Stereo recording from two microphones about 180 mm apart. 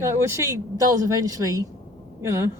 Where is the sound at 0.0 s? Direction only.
15° right (ahead or behind).